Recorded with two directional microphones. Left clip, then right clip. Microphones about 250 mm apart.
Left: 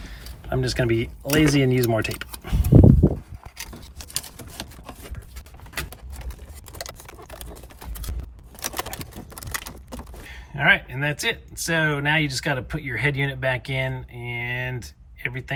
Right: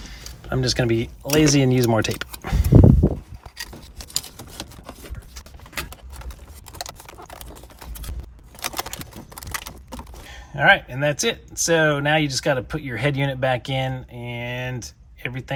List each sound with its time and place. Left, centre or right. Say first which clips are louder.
0.5 s speech: right 2 dB; centre
3.6 s scissors: right 3 dB; centre
5.7 s a sound: right 1 dB; centre
10.5 s speech: right 3 dB; centre